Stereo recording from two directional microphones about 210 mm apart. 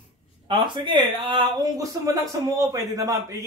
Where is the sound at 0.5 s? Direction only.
20° right (ahead or behind).